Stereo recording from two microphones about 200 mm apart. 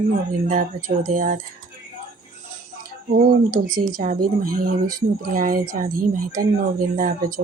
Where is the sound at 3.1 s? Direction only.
45° right (ahead or behind).